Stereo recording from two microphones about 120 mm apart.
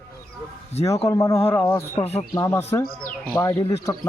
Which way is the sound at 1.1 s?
25° left (ahead or behind).